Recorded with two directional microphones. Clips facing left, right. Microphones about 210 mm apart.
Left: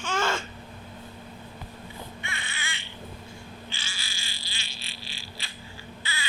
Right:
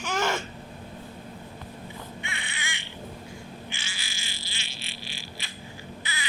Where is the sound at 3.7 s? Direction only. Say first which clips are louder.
Right 2 dB; 20° right (ahead or behind).